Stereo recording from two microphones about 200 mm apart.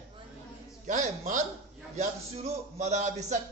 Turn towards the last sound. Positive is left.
turn(degrees=-35)  # may be behind; listen again after turning